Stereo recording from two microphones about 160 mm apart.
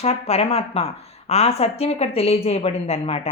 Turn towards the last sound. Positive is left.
turn(degrees=40)  # may be behind; listen again after turning